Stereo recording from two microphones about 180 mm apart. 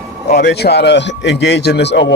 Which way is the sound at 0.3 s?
65° left (ahead or behind).